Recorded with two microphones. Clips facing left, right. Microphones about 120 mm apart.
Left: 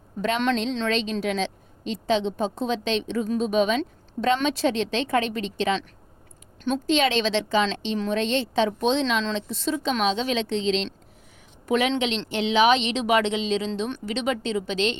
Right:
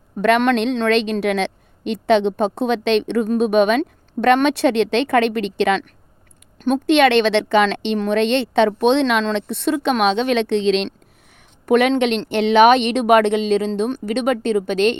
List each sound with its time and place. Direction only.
0.2 s speech: 65° right (ahead or behind)
6.6 s a woman's voice: 60° right (ahead or behind)